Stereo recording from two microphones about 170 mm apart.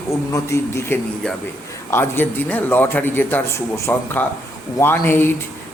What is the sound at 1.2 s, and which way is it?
Speech, 5° left (ahead or behind).